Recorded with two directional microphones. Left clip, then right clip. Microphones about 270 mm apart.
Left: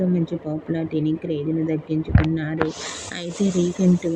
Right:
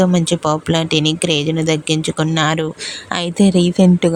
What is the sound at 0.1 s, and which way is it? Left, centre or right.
Speech, right.